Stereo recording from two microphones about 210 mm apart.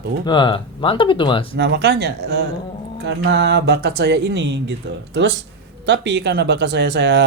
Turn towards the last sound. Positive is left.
turn(degrees=-55)  # may be behind; listen again after turning